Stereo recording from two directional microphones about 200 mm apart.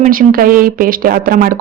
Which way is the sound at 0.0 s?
45° right (ahead or behind).